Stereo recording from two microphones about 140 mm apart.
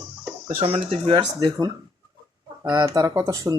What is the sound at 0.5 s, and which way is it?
Speech, 40° right (ahead or behind).